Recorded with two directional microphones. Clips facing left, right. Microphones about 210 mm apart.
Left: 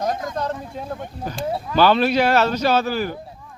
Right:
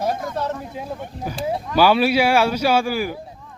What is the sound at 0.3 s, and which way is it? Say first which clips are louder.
Speech: even; 5° right (ahead or behind).